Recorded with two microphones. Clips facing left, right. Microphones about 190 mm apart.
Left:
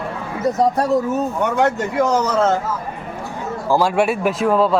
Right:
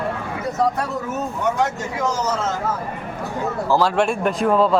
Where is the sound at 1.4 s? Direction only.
60° left (ahead or behind).